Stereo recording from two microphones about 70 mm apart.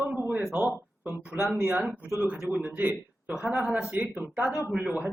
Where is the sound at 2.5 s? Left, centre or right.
Right.